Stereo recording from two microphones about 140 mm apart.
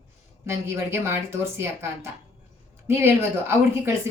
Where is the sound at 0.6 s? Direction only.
20° right (ahead or behind).